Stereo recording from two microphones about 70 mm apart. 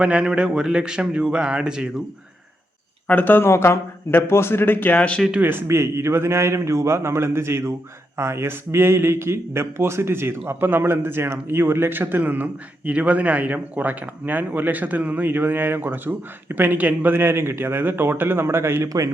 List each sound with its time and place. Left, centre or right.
0.0 s a man's voice: centre
3.1 s speech: left
5.4 s speech: right
5.6 s a man's voice: right
17.2 s a man's voice: right